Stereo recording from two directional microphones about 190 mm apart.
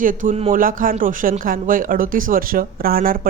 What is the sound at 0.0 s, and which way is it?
Speech, 45° right (ahead or behind).